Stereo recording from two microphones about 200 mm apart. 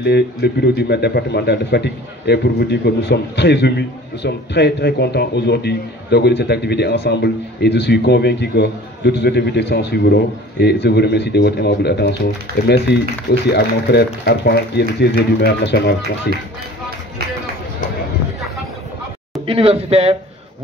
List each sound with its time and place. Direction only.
0.0 s speech: 55° left (ahead or behind)
19.4 s speech: 30° right (ahead or behind)